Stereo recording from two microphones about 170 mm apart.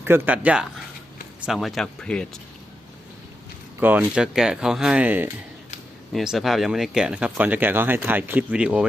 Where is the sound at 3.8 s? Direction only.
10° right (ahead or behind).